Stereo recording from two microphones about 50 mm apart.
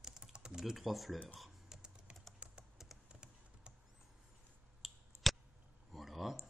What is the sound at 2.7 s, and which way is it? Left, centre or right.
Typing, centre.